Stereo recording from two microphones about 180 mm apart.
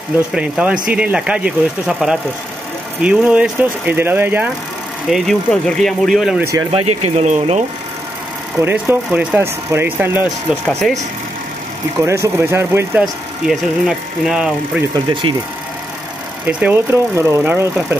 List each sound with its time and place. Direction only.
0.3 s speech: 5° right (ahead or behind)
5.1 s speech: centre (ahead or behind)
6.7 s speech: 35° right (ahead or behind)
8.5 s speech: 10° right (ahead or behind)
10.7 s speech: 5° left (ahead or behind)
12.0 s speech: 15° right (ahead or behind)
13.0 s speech: centre (ahead or behind)
15.3 s speech: 30° right (ahead or behind)
16.4 s speech: 10° right (ahead or behind)